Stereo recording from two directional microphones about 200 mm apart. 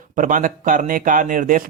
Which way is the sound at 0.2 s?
40° right (ahead or behind).